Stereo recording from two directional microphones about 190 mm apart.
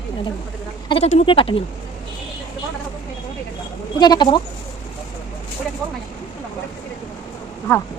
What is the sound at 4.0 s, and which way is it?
Speech, 20° left (ahead or behind).